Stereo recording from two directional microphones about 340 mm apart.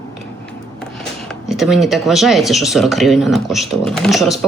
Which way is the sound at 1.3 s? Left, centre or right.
Centre.